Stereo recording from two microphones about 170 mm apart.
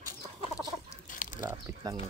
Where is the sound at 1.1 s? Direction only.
50° left (ahead or behind).